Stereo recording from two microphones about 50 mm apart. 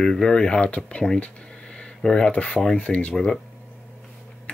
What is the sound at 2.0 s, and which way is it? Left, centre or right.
Speech, centre.